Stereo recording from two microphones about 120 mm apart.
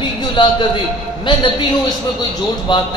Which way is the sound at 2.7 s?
40° left (ahead or behind).